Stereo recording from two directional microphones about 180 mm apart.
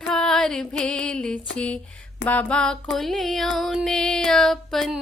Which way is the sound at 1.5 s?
5° left (ahead or behind).